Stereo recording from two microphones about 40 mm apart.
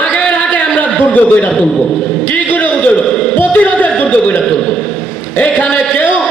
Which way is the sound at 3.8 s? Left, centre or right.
Left.